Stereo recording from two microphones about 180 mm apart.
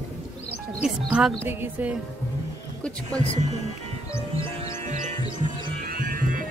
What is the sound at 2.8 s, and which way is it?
Speech, 5° left (ahead or behind).